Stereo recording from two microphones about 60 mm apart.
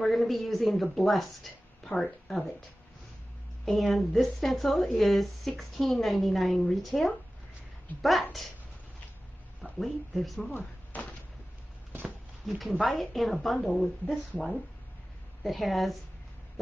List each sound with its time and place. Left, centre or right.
0.0 s a woman's voice: centre
3.6 s a woman's voice: centre
9.6 s speech: centre
10.9 s a sound: left
12.8 s a woman's voice: centre
15.4 s a woman's voice: centre